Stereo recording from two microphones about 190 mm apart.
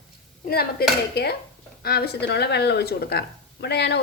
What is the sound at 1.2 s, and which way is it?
A woman's voice, 60° left (ahead or behind).